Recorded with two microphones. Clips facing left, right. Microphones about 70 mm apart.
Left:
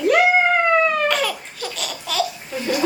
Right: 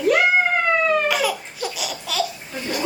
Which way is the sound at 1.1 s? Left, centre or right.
Centre.